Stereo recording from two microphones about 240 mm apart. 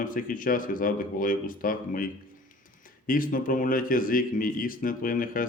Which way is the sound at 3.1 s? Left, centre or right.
Left.